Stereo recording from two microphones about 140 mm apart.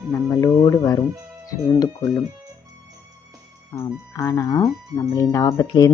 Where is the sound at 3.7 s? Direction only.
20° left (ahead or behind).